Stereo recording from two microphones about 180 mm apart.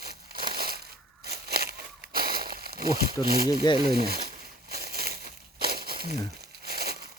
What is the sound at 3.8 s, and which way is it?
Crumpling, 55° right (ahead or behind).